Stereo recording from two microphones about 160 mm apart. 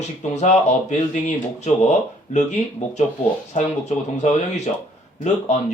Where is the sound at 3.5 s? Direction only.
45° left (ahead or behind).